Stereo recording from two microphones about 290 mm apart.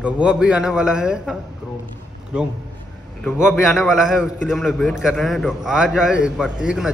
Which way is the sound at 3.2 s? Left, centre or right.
Centre.